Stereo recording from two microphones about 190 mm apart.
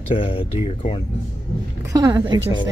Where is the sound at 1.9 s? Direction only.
20° right (ahead or behind).